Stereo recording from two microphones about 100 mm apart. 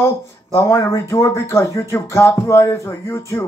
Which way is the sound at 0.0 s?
25° left (ahead or behind).